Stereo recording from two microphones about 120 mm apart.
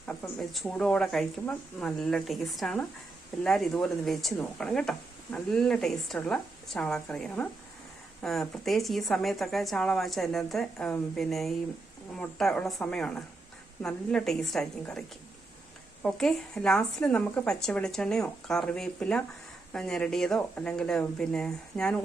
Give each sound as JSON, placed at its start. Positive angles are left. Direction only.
{"t": 0.3, "sound": "speech", "side_deg": 0}
{"t": 16.0, "sound": "speech", "side_deg": 5}